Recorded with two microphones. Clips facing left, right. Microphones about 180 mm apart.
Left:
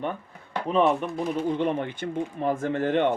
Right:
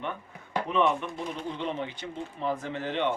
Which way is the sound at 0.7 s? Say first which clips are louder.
Left 4 dB; 35° left (ahead or behind).